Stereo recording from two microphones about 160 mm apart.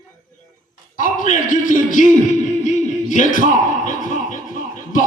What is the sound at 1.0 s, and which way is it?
Speech, 55° left (ahead or behind).